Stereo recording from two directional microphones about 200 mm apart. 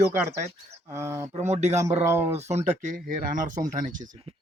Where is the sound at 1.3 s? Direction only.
35° right (ahead or behind).